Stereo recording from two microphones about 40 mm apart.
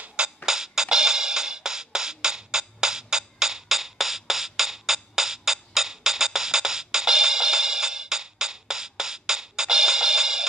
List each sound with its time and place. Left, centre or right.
0.5 s music: centre